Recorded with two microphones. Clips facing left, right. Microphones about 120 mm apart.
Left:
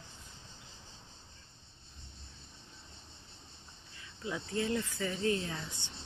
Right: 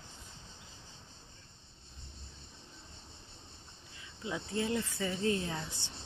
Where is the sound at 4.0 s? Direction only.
20° right (ahead or behind).